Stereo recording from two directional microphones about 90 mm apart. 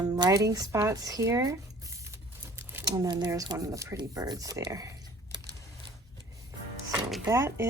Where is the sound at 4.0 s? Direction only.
45° right (ahead or behind).